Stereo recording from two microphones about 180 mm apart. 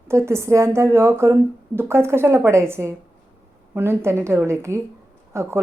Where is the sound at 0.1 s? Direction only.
15° right (ahead or behind).